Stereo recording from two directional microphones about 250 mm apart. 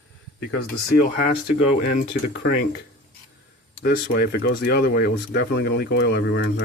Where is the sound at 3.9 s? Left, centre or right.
Left.